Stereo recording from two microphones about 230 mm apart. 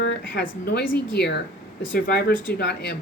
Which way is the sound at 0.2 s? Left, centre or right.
Left.